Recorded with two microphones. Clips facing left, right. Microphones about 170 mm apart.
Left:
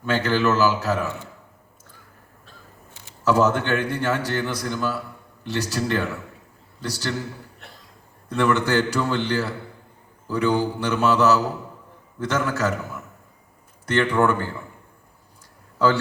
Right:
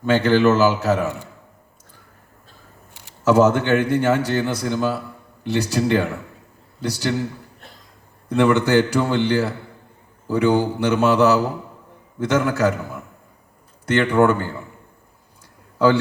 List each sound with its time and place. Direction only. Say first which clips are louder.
0.0 s a man's voice: right 6 dB; 15° right (ahead or behind)
2.9 s a man's voice: right 4 dB; 15° right (ahead or behind)
8.4 s a man's voice: right 4 dB; 15° right (ahead or behind)
13.9 s a man's voice: right 4 dB; 15° right (ahead or behind)